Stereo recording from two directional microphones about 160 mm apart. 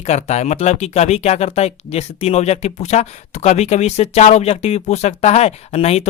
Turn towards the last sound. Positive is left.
turn(degrees=40)  # may be behind; listen again after turning